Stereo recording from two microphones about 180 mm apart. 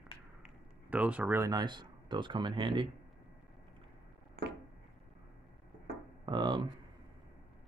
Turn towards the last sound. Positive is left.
turn(degrees=-25)  # may be behind; listen again after turning